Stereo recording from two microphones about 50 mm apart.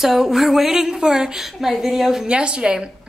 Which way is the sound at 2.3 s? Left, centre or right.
Centre.